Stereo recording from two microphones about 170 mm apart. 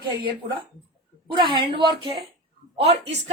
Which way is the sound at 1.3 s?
30° right (ahead or behind).